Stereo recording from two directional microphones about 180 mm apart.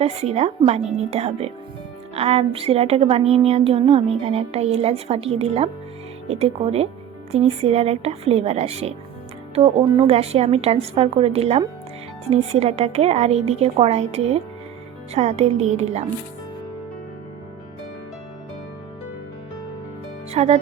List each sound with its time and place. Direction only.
0.0 s a woman's voice: 35° right (ahead or behind)
20.3 s speech: 35° right (ahead or behind)